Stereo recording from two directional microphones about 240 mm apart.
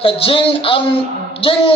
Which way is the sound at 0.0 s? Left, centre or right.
Left.